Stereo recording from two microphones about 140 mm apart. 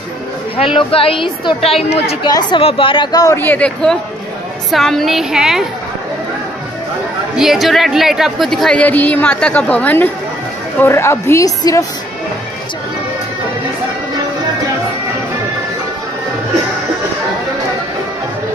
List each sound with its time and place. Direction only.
0.7 s a woman's voice: 40° left (ahead or behind)
2.2 s a woman's voice: 35° left (ahead or behind)
3.3 s speech: 10° left (ahead or behind)
7.3 s a woman's voice: centre (ahead or behind); by 11.8 s 25° left (ahead or behind)